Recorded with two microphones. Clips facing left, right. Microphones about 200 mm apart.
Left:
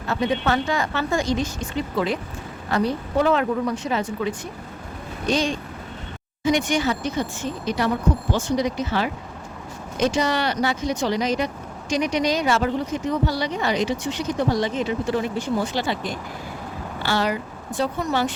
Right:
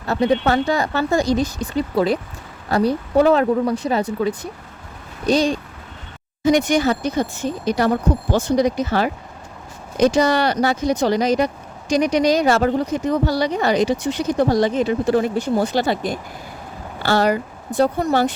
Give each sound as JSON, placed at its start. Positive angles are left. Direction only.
{"t": 0.1, "sound": "speech", "side_deg": -35}